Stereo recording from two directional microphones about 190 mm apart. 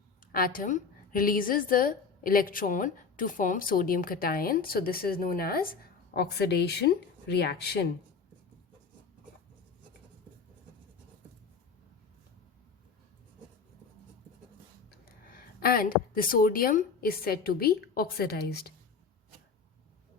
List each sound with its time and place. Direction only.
0.3 s a woman's voice: 50° left (ahead or behind)
15.4 s a woman's voice: 50° left (ahead or behind)